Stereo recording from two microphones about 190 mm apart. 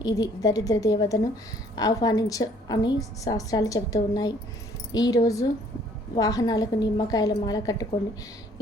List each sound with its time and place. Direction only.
0.0 s a woman's voice: 20° left (ahead or behind)